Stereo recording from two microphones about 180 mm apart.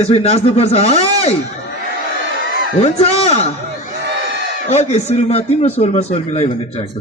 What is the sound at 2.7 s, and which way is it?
Speech, 35° left (ahead or behind).